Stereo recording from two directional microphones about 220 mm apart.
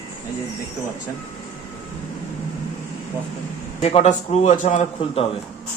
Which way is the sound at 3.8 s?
30° left (ahead or behind).